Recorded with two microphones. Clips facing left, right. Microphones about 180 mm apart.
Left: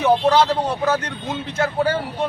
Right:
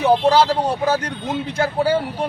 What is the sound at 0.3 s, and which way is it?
Speech, 10° right (ahead or behind).